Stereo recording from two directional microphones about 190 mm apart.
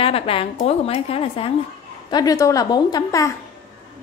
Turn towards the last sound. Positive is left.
turn(degrees=20)  # may be behind; listen again after turning